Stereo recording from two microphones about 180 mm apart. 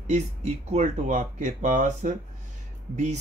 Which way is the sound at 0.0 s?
40° right (ahead or behind).